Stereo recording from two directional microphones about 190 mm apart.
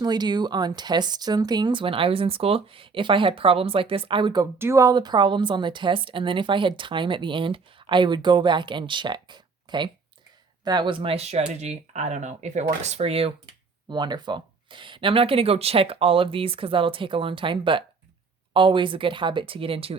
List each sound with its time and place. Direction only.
0.0 s a woman's voice: 20° right (ahead or behind)
4.5 s a woman's voice: 15° right (ahead or behind); by 20.0 s 30° right (ahead or behind)